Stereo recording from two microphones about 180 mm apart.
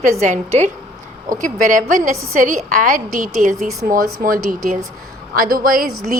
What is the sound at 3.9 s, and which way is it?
A woman's voice, 50° right (ahead or behind).